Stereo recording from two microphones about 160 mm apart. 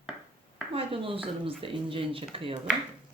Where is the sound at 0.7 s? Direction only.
35° right (ahead or behind).